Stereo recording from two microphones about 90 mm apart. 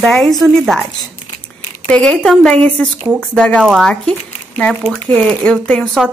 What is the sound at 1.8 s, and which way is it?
Speech, 10° left (ahead or behind).